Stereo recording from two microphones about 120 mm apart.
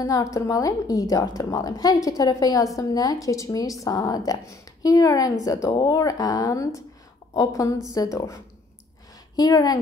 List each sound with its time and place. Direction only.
0.0 s a woman's voice: 30° left (ahead or behind)
5.7 s speech: 45° left (ahead or behind)
5.9 s a woman's voice: 30° left (ahead or behind)
9.4 s a woman's voice: 30° left (ahead or behind)